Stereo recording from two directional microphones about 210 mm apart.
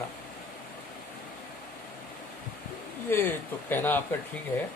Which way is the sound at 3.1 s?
10° left (ahead or behind).